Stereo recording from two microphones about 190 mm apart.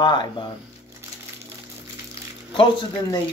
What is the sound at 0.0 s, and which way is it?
Speech, 25° left (ahead or behind).